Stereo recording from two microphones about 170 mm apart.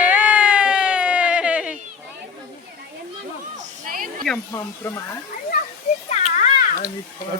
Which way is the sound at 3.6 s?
55° right (ahead or behind).